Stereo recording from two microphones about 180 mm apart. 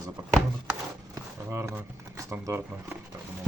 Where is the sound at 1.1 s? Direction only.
15° right (ahead or behind).